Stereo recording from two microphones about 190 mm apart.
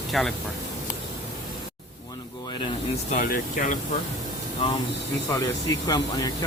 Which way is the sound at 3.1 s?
45° left (ahead or behind).